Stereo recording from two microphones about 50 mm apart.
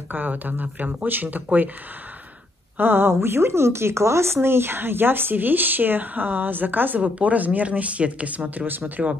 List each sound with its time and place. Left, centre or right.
0.1 s speech: right
2.8 s speech: right
7.0 s speech: right